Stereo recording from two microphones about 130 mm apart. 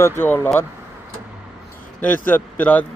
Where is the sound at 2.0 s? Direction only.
15° left (ahead or behind).